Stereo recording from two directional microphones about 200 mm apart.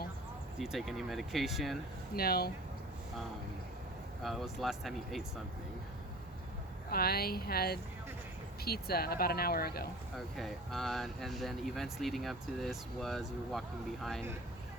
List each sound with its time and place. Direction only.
0.6 s speech: centre (ahead or behind)
2.1 s speech: 50° left (ahead or behind)
4.2 s speech: centre (ahead or behind)
6.9 s speech: 50° left (ahead or behind)
10.2 s speech: centre (ahead or behind)